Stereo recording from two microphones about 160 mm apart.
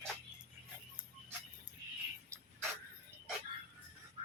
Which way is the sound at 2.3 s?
15° right (ahead or behind).